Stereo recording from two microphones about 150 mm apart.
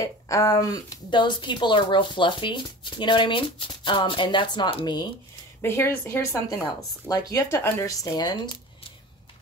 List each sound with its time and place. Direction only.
0.0 s speech: 20° left (ahead or behind)
5.6 s speech: 15° left (ahead or behind)